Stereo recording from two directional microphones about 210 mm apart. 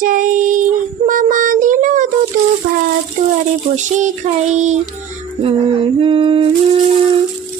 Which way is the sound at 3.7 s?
35° right (ahead or behind).